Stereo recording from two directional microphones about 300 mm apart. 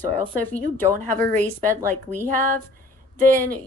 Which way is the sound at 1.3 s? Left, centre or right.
Right.